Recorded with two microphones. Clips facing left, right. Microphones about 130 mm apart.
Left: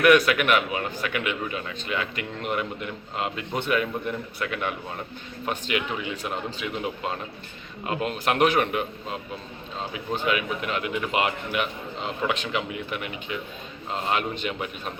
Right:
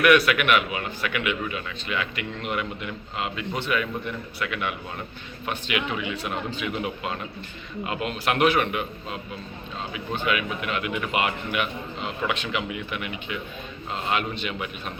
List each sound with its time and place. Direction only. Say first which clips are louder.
0.0 s a man's voice: left 1 dB; 40° left (ahead or behind)
10.2 s a man's voice: even; 35° left (ahead or behind)